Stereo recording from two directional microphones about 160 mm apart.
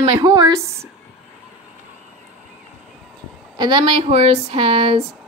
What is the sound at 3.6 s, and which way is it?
Speech, 30° right (ahead or behind).